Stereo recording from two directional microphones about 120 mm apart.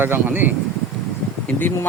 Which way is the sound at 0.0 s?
15° right (ahead or behind).